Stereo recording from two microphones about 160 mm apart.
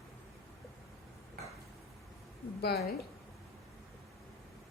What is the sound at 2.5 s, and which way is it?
Speech, 90° left.